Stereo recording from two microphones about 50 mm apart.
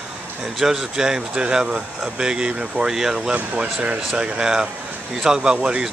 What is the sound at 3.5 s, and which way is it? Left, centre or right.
Speech, right.